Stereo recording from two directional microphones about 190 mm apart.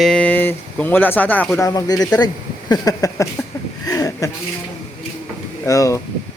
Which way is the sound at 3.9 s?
15° left (ahead or behind).